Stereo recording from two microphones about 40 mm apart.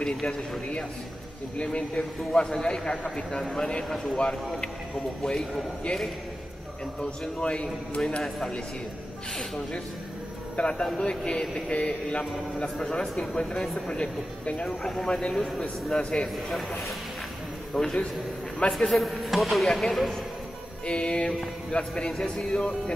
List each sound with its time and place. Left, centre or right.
0.0 s speech: left
2.0 s a man's voice: centre
3.9 s a man's voice: centre
7.0 s speech: left
10.5 s speech: left
12.5 s a man's voice: centre
14.8 s a man's voice: centre
15.0 s speech: left
17.8 s a man's voice: centre
20.8 s speech: left